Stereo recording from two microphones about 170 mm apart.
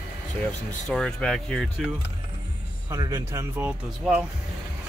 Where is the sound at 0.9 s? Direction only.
5° left (ahead or behind).